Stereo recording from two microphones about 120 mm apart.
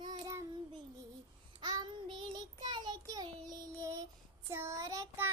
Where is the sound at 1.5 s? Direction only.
35° right (ahead or behind).